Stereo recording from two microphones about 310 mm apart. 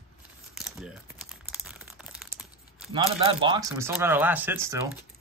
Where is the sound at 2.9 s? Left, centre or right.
Centre.